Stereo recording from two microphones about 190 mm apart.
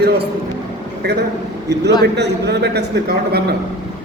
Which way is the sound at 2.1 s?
60° right (ahead or behind).